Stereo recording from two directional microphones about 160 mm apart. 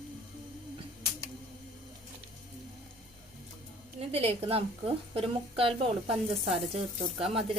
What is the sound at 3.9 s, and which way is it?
A woman's voice, 40° right (ahead or behind).